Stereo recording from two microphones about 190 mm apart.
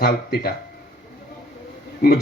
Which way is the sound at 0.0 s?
55° left (ahead or behind).